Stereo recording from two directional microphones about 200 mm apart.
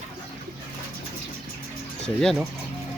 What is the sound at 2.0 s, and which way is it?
Speech, centre (ahead or behind).